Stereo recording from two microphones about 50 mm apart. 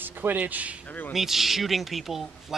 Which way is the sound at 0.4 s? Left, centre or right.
Right.